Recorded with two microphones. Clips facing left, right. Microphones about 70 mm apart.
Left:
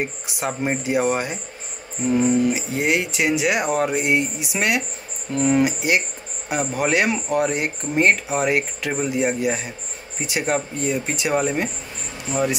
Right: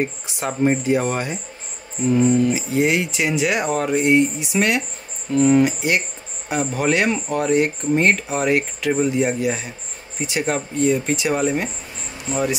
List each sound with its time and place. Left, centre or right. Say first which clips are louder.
0.0 s speech: right 2 dB; centre